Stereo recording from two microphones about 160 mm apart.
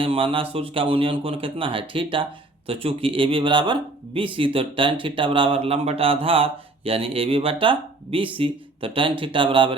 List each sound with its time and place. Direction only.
0.0 s speech: 35° right (ahead or behind)